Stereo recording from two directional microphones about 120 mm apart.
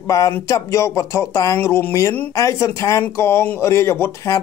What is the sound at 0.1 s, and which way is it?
Speech, 30° left (ahead or behind).